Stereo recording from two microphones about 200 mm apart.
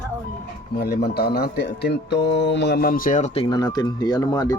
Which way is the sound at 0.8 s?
50° left (ahead or behind).